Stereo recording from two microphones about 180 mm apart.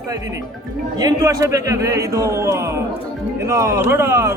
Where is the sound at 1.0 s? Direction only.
20° right (ahead or behind).